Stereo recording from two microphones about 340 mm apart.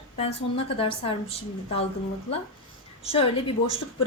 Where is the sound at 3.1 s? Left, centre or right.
Centre.